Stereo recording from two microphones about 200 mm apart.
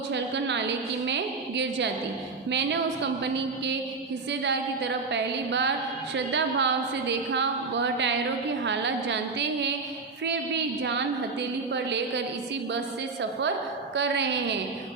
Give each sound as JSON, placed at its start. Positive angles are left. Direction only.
{"t": 0.1, "sound": "a woman's voice", "side_deg": -60}
{"t": 4.3, "sound": "a woman's voice", "side_deg": -60}
{"t": 10.2, "sound": "a woman's voice", "side_deg": -60}
{"t": 13.9, "sound": "a woman's voice", "side_deg": -60}